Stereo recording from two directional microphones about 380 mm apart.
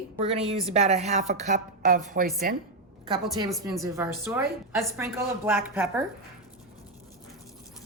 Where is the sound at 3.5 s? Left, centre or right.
Centre.